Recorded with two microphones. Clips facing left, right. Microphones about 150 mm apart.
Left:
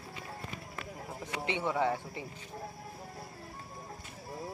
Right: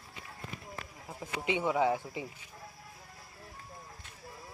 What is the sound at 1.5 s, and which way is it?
Speech, 10° right (ahead or behind).